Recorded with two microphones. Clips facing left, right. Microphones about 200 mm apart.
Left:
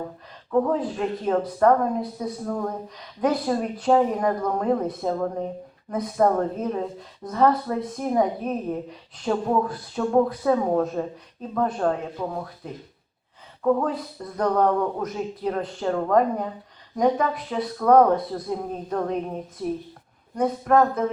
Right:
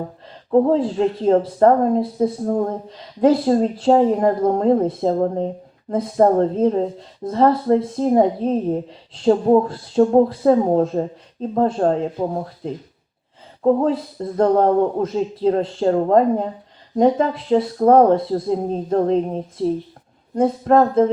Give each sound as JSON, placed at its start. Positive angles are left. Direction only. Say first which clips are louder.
{"t": 0.5, "sound": "speech", "louder": "right 7 dB", "side_deg": -30}